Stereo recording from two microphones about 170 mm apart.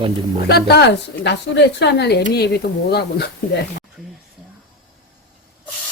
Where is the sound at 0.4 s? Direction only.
75° left (ahead or behind).